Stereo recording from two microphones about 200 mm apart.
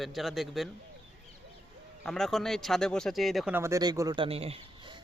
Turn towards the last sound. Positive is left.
turn(degrees=-25)  # may be behind; listen again after turning